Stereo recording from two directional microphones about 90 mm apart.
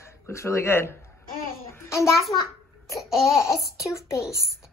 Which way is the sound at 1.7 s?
30° left (ahead or behind).